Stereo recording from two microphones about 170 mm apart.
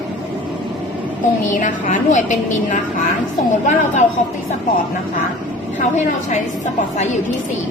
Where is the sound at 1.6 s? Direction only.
50° left (ahead or behind).